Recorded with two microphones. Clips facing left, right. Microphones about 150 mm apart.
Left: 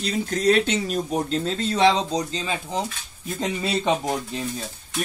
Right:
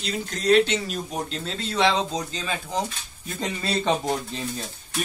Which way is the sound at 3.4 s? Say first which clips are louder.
Left 2 dB; 10° left (ahead or behind).